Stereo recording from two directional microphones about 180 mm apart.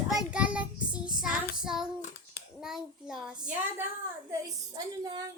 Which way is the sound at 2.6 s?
5° right (ahead or behind).